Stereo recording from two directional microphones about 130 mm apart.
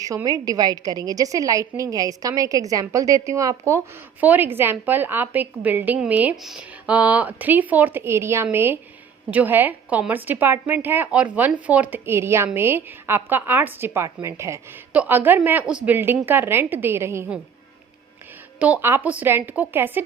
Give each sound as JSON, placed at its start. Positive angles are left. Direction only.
{"t": 0.3, "sound": "a woman's voice", "side_deg": -30}
{"t": 18.6, "sound": "a woman's voice", "side_deg": -15}